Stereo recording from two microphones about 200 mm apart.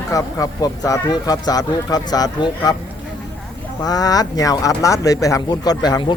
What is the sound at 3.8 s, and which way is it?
Speech, 20° left (ahead or behind).